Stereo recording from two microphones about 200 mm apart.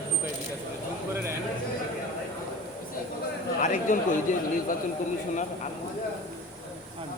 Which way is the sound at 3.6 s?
40° left (ahead or behind).